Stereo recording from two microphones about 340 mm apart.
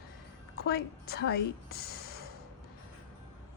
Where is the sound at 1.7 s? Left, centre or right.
Left.